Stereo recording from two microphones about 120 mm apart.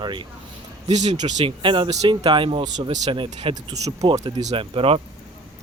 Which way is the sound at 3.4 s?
65° right (ahead or behind).